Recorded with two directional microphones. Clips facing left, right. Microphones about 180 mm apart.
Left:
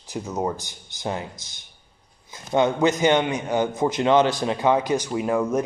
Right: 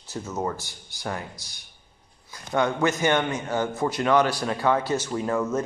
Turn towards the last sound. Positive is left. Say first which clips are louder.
# left 3 dB
turn(degrees=15)  # may be behind; listen again after turning